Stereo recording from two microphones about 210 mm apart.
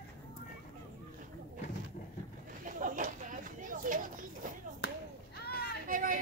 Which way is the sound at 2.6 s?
40° right (ahead or behind).